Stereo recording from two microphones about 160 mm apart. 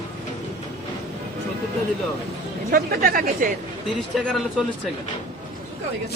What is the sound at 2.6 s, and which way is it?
Speech, 70° right (ahead or behind).